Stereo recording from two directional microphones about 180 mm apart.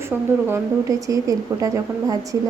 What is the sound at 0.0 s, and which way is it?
Speech, 15° right (ahead or behind).